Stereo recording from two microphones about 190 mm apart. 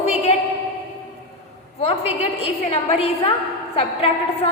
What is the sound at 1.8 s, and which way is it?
A woman's voice, 30° left (ahead or behind).